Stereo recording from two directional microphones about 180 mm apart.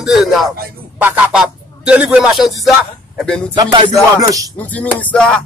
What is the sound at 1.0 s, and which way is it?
Music, 10° right (ahead or behind).